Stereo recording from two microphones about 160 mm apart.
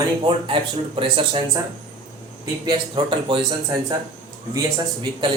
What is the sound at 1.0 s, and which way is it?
Speech, 35° right (ahead or behind).